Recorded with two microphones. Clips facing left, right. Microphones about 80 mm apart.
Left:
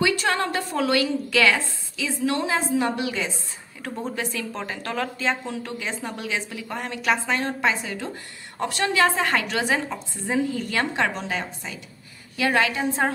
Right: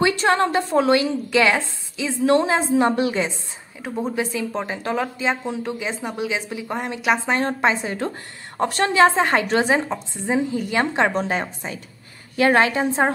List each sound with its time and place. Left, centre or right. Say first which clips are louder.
0.0 s a woman's voice: right 5 dB; right
3.8 s a woman's voice: right 5 dB; centre; by 8.9 s right
8.9 s a woman's voice: right 5 dB; right
11.1 s a woman's voice: right 6 dB; right